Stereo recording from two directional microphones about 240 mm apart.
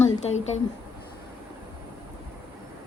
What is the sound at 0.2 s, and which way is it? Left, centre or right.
Speech, left.